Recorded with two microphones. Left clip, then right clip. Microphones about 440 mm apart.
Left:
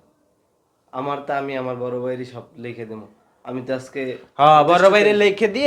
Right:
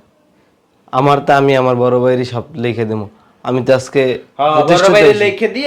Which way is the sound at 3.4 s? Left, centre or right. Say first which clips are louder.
Right 14 dB; right.